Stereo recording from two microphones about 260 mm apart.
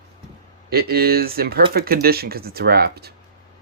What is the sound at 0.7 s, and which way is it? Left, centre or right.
Speech, right.